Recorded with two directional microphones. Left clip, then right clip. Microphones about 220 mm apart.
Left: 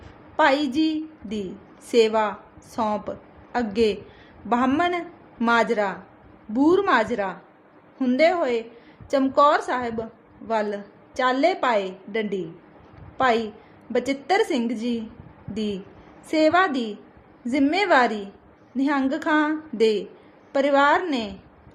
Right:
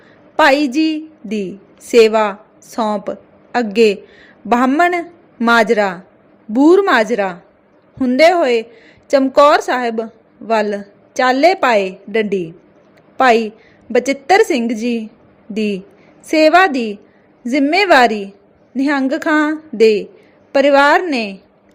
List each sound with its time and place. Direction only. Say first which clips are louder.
0.3 s a woman's voice: right 8 dB; 30° right (ahead or behind)